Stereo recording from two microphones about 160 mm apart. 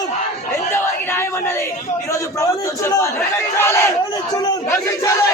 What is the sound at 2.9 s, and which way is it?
Speech, 15° left (ahead or behind).